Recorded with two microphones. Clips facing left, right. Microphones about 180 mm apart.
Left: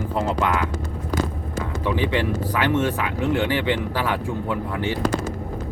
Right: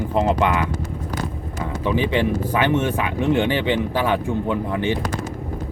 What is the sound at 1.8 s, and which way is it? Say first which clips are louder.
Speech: right 3 dB; 15° right (ahead or behind).